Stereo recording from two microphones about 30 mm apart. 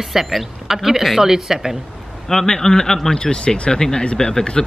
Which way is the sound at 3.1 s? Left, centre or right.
Left.